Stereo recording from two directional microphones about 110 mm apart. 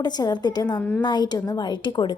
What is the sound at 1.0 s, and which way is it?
A woman's voice, 40° left (ahead or behind).